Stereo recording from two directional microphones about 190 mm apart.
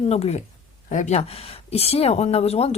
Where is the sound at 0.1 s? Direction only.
35° left (ahead or behind).